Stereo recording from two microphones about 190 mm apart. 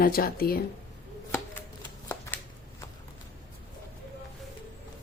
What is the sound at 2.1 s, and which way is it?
Shuffling cards, 10° left (ahead or behind).